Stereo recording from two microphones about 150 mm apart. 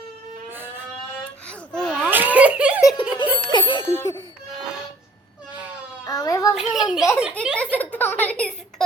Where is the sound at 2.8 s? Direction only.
30° left (ahead or behind).